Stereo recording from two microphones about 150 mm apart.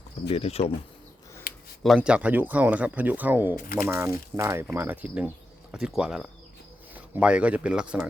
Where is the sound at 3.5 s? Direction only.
75° left (ahead or behind).